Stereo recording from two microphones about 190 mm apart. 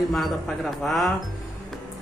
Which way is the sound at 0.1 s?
Centre (ahead or behind).